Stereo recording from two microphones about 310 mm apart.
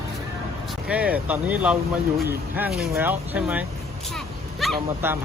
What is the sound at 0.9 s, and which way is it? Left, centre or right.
Speech, centre.